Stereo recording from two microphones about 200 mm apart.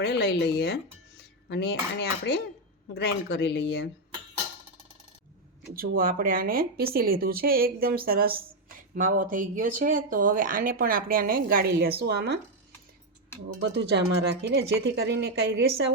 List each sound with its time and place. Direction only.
0.0 s speech: 55° left (ahead or behind)
6.0 s speech: 45° right (ahead or behind)
13.6 s speech: 60° right (ahead or behind)